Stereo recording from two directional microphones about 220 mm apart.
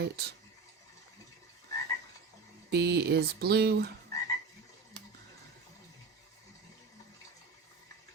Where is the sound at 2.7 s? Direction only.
50° right (ahead or behind).